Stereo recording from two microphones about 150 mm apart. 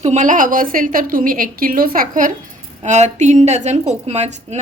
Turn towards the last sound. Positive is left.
turn(degrees=-45)  # may be behind; listen again after turning